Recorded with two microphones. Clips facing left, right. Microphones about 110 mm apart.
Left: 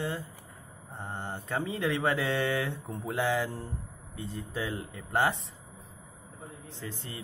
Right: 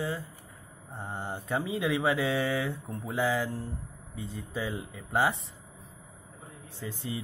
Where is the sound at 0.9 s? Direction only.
15° right (ahead or behind).